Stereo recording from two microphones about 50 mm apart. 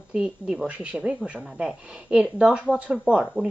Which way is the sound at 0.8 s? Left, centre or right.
Right.